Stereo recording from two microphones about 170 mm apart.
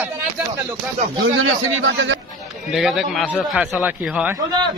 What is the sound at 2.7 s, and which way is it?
A man's voice, centre (ahead or behind).